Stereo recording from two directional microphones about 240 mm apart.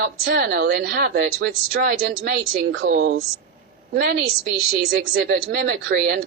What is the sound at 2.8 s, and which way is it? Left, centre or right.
Speech, right.